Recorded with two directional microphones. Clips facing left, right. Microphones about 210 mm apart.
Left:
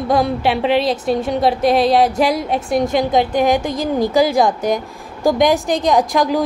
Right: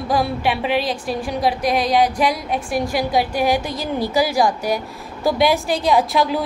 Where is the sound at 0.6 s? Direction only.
25° left (ahead or behind).